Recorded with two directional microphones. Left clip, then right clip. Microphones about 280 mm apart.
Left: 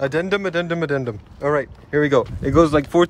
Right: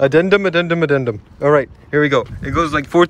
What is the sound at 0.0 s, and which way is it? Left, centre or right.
Speech, centre.